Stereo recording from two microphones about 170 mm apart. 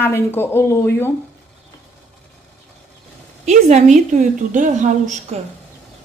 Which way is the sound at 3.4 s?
40° right (ahead or behind).